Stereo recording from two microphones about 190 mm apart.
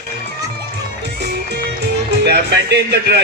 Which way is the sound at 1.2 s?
60° right (ahead or behind).